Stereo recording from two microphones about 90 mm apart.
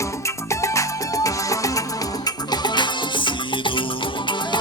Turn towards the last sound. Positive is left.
turn(degrees=65)  # may be behind; listen again after turning